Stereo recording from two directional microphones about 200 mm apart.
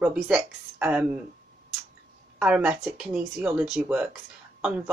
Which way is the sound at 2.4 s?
5° right (ahead or behind).